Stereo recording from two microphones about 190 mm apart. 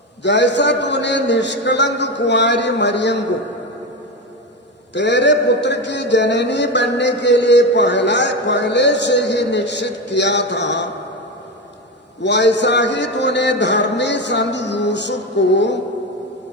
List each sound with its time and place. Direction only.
0.2 s a man's voice: 65° left (ahead or behind)
4.9 s a man's voice: 65° left (ahead or behind)
12.2 s a man's voice: 65° left (ahead or behind)